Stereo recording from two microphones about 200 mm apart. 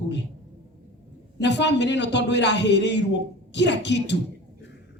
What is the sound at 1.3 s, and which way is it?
Speech, 60° left (ahead or behind).